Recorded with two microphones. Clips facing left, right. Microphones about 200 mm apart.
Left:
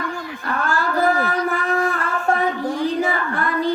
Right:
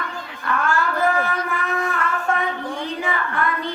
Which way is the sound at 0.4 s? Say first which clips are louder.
Right 1 dB; 35° left (ahead or behind).